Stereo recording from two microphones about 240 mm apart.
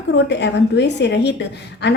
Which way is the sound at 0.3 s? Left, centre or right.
Left.